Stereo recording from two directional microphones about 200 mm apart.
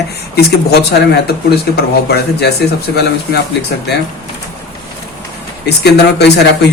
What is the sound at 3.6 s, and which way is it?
Speech, 65° left (ahead or behind).